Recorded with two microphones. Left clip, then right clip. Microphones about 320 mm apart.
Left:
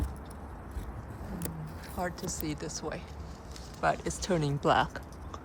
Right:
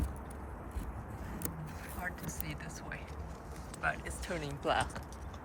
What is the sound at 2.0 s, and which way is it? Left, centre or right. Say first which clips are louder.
Speech: left 8 dB; centre.